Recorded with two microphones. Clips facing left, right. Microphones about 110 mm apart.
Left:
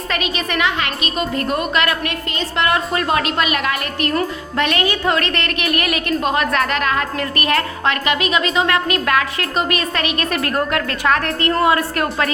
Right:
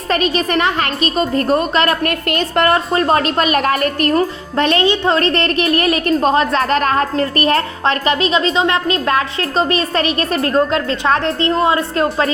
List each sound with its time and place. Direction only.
0.1 s speech: 35° right (ahead or behind)
2.0 s a woman's voice: 55° right (ahead or behind)
2.6 s speech: 35° right (ahead or behind)